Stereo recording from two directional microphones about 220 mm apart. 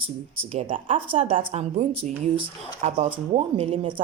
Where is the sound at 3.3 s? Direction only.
25° right (ahead or behind).